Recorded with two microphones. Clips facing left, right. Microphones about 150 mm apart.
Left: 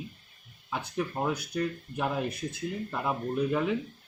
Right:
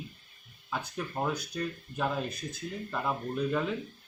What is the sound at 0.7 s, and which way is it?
Speech, 15° left (ahead or behind).